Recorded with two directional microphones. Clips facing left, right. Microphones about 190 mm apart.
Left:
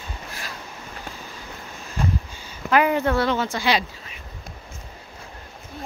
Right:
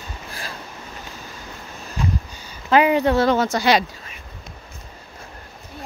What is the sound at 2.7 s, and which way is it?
Speech, 20° right (ahead or behind).